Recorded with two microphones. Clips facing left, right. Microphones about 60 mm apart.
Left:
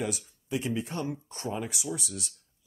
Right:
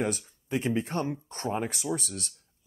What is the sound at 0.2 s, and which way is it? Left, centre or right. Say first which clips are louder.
Speech: right 2 dB; right.